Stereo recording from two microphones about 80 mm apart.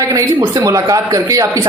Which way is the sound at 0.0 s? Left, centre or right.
Right.